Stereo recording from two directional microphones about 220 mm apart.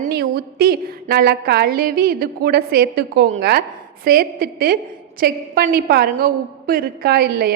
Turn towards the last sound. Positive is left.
turn(degrees=-45)  # may be behind; listen again after turning